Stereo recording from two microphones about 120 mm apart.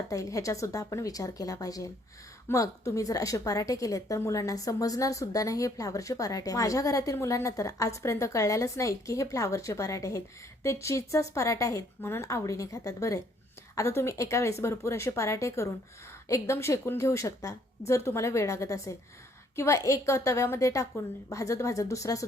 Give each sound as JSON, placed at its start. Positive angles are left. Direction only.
{"t": 0.1, "sound": "a woman's voice", "side_deg": 25}